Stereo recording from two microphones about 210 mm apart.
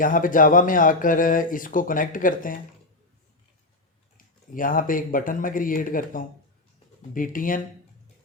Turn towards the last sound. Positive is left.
turn(degrees=40)  # may be behind; listen again after turning